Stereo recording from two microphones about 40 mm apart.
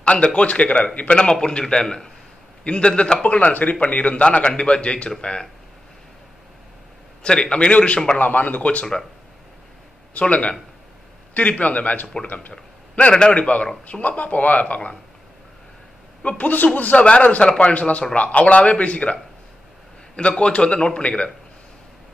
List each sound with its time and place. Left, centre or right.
0.0 s a man's voice: left
3.3 s speech: left
4.1 s a man's voice: left
7.2 s a man's voice: left
8.2 s speech: left
10.1 s speech: left
16.3 s a man's voice: left
20.2 s a man's voice: left